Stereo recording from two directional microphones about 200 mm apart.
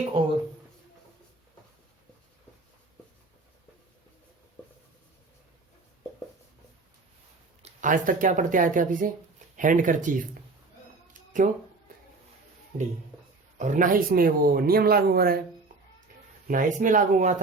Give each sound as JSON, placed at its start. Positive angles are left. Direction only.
{"t": 7.6, "sound": "speech", "side_deg": -40}
{"t": 11.3, "sound": "speech", "side_deg": -40}
{"t": 13.6, "sound": "speech", "side_deg": -40}
{"t": 16.5, "sound": "speech", "side_deg": -40}